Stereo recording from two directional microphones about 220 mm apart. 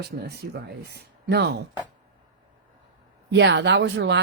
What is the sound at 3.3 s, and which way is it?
Speech, 50° right (ahead or behind).